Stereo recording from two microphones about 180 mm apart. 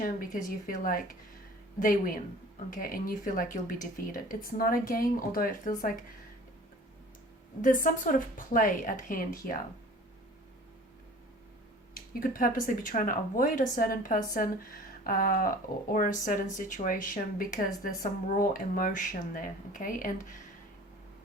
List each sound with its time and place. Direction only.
0.0 s speech: 50° left (ahead or behind)
7.6 s speech: 45° left (ahead or behind)
11.9 s speech: 50° left (ahead or behind)